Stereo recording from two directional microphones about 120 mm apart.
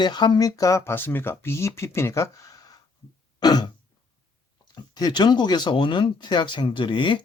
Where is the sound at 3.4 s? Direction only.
35° left (ahead or behind).